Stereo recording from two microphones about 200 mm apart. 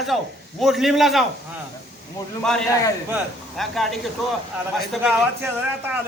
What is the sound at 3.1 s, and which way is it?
A woman's voice, centre (ahead or behind).